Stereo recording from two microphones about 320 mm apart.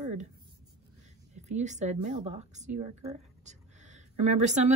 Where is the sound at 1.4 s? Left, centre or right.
Right.